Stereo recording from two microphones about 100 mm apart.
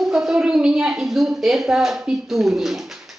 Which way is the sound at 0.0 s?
5° right (ahead or behind).